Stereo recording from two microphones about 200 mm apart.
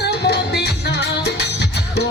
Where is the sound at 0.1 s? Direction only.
55° left (ahead or behind).